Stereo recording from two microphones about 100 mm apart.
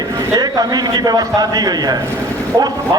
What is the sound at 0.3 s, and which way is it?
Speech, 40° right (ahead or behind).